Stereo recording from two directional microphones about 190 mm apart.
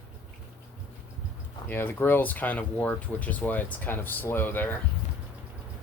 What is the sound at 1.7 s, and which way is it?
Speech, 10° left (ahead or behind).